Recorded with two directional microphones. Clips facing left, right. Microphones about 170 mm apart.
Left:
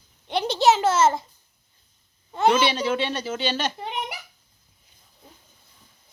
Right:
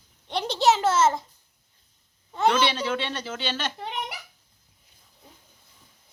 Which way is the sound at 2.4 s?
15° left (ahead or behind).